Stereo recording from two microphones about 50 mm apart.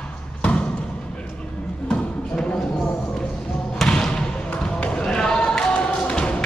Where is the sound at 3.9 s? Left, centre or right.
Centre.